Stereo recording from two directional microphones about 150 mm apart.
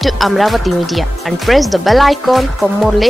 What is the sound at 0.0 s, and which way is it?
Speech, centre (ahead or behind).